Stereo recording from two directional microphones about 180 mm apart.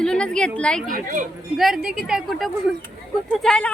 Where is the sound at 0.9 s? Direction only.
50° right (ahead or behind).